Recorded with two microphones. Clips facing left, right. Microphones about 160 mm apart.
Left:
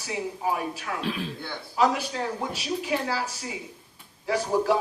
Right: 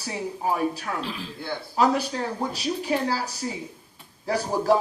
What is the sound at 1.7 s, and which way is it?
Speech, 40° right (ahead or behind).